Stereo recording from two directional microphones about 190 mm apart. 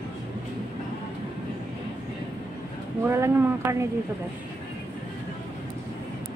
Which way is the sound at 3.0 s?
15° right (ahead or behind).